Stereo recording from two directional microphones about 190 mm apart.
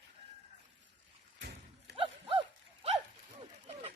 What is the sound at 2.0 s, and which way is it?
Wild animals, 25° right (ahead or behind).